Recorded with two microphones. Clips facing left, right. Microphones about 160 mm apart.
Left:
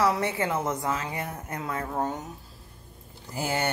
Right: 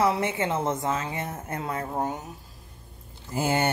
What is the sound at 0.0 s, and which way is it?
A woman's voice, 25° right (ahead or behind).